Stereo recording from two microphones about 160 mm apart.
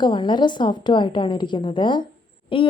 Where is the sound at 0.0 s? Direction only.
30° left (ahead or behind).